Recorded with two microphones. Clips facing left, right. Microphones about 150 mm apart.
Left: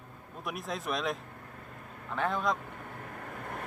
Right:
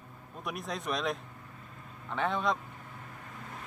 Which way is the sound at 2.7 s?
60° left (ahead or behind).